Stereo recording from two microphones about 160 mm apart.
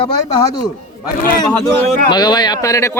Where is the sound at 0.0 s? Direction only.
25° left (ahead or behind).